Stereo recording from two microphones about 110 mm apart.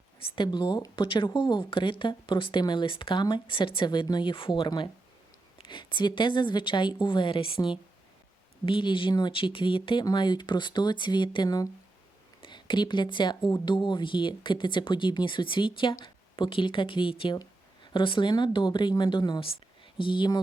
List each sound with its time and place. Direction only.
0.3 s speech: 45° left (ahead or behind)
11.4 s speech: 30° left (ahead or behind)
12.4 s speech: 45° left (ahead or behind)